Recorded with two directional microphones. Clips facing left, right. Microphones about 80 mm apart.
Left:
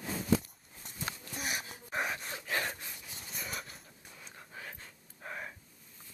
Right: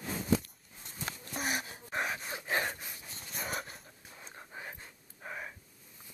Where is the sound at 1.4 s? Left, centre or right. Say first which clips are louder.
Right 3 dB; right.